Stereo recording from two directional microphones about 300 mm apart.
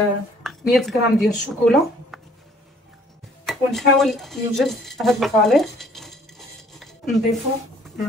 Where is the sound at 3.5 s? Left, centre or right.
Centre.